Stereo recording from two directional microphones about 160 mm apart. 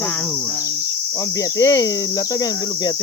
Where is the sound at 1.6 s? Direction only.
20° left (ahead or behind).